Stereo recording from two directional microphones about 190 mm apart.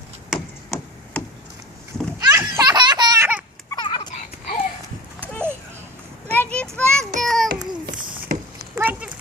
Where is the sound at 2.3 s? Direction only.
15° right (ahead or behind).